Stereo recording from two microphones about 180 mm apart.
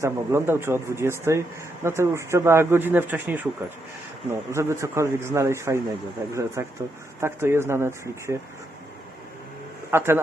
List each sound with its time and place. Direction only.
0.0 s speech: 15° right (ahead or behind)
9.9 s speech: 15° right (ahead or behind)